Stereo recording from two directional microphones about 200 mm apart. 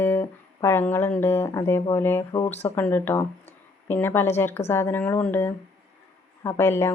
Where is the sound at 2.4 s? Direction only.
30° left (ahead or behind).